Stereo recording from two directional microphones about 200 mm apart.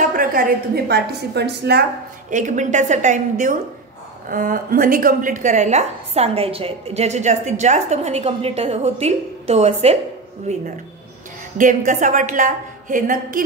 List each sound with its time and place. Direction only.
0.1 s a woman's voice: 45° right (ahead or behind)
2.3 s a woman's voice: 40° right (ahead or behind)